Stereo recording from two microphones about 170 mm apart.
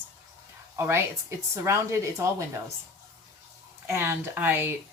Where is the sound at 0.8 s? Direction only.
15° right (ahead or behind).